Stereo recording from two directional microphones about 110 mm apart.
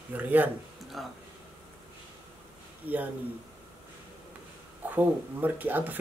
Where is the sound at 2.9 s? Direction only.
15° right (ahead or behind).